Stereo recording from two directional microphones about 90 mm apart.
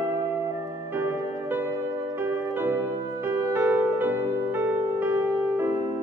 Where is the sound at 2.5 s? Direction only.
25° right (ahead or behind).